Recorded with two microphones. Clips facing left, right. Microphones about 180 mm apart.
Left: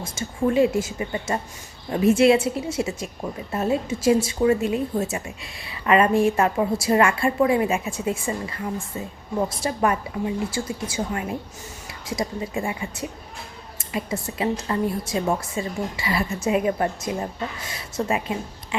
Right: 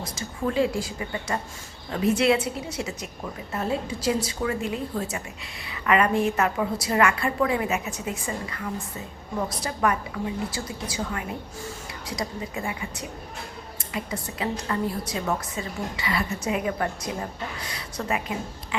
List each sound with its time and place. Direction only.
0.2 s a woman's voice: 25° left (ahead or behind)